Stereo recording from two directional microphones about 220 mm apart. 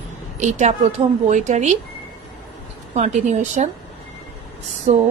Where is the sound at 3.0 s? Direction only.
30° right (ahead or behind).